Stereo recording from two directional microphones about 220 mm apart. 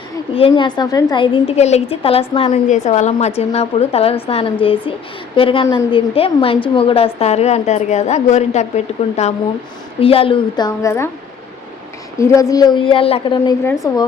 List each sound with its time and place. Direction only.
0.3 s a woman's voice: 25° left (ahead or behind)
12.2 s a woman's voice: 15° left (ahead or behind)